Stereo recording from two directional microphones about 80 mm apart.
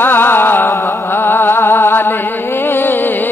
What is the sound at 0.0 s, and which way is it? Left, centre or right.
Music, left.